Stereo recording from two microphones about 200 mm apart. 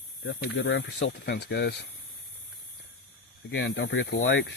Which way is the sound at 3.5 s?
60° left (ahead or behind).